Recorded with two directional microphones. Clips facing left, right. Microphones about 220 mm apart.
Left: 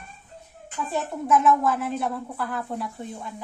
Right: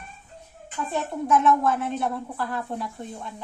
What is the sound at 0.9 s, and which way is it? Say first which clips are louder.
Speech: even; centre (ahead or behind).